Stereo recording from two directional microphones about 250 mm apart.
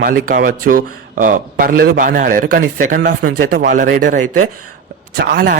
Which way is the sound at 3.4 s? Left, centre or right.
Right.